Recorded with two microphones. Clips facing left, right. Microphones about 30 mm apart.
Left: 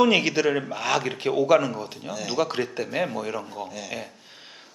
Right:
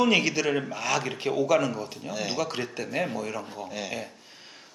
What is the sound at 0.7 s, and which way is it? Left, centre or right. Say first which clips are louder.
Speech: left 3 dB; centre.